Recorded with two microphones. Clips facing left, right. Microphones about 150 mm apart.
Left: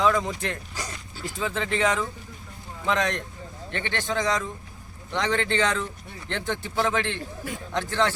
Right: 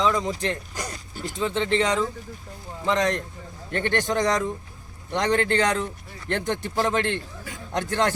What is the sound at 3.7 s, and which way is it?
Speech, 45° right (ahead or behind).